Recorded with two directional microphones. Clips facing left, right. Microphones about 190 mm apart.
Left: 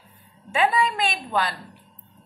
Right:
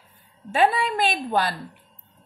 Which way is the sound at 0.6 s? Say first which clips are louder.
Right 1 dB; 40° right (ahead or behind).